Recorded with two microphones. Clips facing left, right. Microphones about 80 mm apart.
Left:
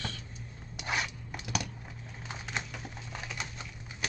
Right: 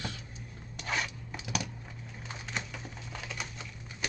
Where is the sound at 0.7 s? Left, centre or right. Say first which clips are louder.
Even; centre.